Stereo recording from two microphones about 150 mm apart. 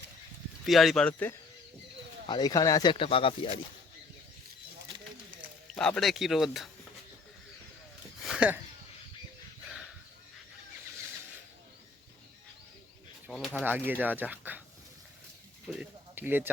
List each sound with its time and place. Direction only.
0.6 s speech: centre (ahead or behind)
2.2 s speech: 30° left (ahead or behind)
5.7 s speech: 5° left (ahead or behind)
8.2 s a sound: 5° right (ahead or behind)
13.3 s speech: centre (ahead or behind)
13.7 s speech: 10° right (ahead or behind)
15.7 s speech: 10° right (ahead or behind)